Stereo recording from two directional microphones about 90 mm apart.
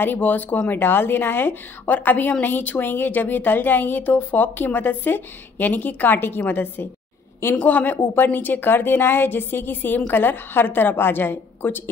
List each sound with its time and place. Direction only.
0.0 s speech: 20° left (ahead or behind)